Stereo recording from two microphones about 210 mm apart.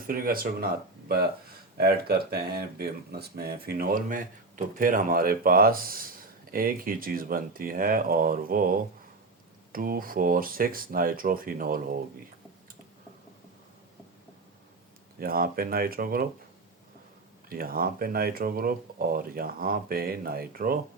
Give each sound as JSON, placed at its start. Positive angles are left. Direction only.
{"t": 0.1, "sound": "speech", "side_deg": -45}
{"t": 15.2, "sound": "speech", "side_deg": -45}
{"t": 17.5, "sound": "speech", "side_deg": -45}